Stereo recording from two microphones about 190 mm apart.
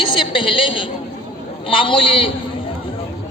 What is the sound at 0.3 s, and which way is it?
A woman's voice, 25° left (ahead or behind).